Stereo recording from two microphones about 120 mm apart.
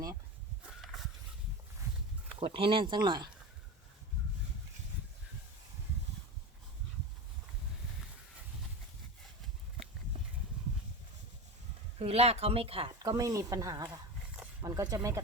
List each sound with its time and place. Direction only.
2.4 s speech: 50° right (ahead or behind)
11.9 s speech: 55° right (ahead or behind)
13.0 s speech: 30° right (ahead or behind)